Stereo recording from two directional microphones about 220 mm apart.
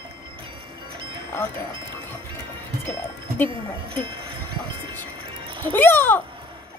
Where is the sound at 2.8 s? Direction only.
10° left (ahead or behind).